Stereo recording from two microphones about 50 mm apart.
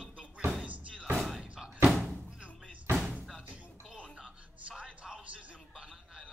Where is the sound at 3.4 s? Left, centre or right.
Right.